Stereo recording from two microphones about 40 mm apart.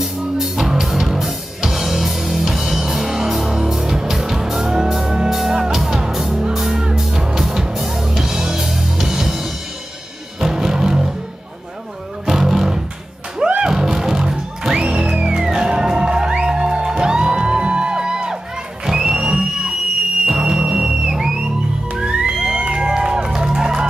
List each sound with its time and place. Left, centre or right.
0.0 s music: centre
12.3 s music: centre